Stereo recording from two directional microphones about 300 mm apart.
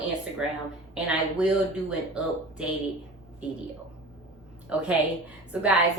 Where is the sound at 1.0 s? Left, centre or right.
Centre.